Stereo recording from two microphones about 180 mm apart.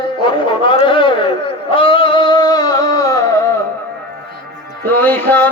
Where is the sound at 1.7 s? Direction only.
30° left (ahead or behind).